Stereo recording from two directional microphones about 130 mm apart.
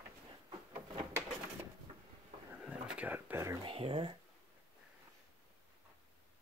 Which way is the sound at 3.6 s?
45° right (ahead or behind).